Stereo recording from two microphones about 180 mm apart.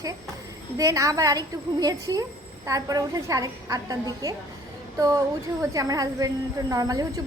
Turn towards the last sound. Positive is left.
turn(degrees=-20)  # may be behind; listen again after turning